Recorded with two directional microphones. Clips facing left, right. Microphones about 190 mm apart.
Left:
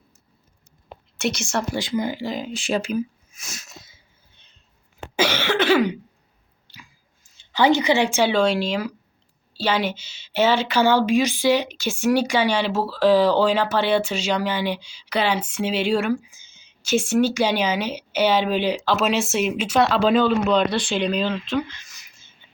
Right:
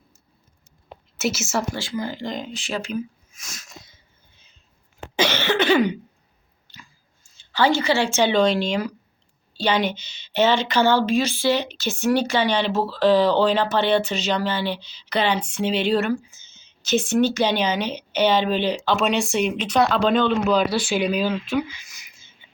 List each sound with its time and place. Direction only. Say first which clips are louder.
1.2 s a woman's voice: even; 5° right (ahead or behind)
1.7 s a woman's voice: left 4 dB; 20° left (ahead or behind)
2.8 s a sound: left 3 dB; 5° left (ahead or behind)
5.1 s cough: even; 5° left (ahead or behind)
7.5 s a woman's voice: left 2 dB; 20° left (ahead or behind); by 22.0 s 10° right (ahead or behind)